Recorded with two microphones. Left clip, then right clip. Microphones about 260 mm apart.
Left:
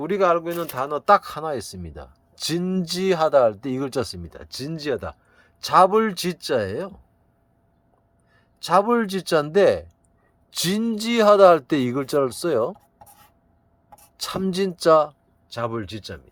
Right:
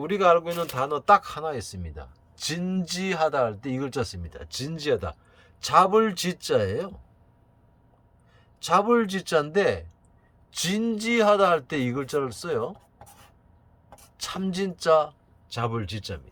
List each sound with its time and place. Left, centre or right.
0.0 s speech: centre
8.6 s speech: centre
14.2 s speech: left
15.4 s speech: centre